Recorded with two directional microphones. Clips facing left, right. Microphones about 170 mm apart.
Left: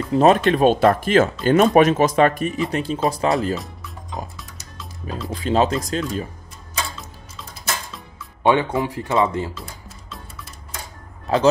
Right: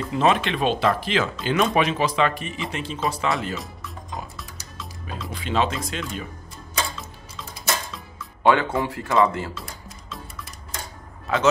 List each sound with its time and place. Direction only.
0.1 s speech: 40° left (ahead or behind)
3.5 s music: centre (ahead or behind)
5.3 s speech: 40° left (ahead or behind)
8.5 s speech: 20° left (ahead or behind)
11.3 s speech: 35° left (ahead or behind)